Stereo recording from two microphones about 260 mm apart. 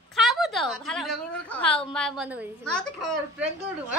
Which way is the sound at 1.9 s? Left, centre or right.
Centre.